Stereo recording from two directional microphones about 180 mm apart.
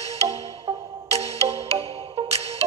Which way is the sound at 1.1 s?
35° right (ahead or behind).